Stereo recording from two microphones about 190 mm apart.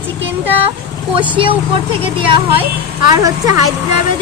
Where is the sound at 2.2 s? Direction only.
30° right (ahead or behind).